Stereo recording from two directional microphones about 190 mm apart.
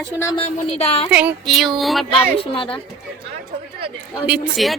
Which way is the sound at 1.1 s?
5° right (ahead or behind).